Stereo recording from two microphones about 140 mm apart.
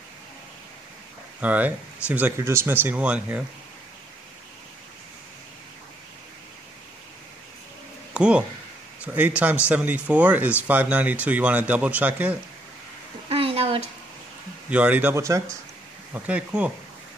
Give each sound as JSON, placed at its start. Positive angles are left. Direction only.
{"t": 1.4, "sound": "speech", "side_deg": -10}
{"t": 8.1, "sound": "speech", "side_deg": -5}
{"t": 13.3, "sound": "a sound", "side_deg": -40}
{"t": 14.7, "sound": "speech", "side_deg": -10}
{"t": 16.1, "sound": "speech", "side_deg": -10}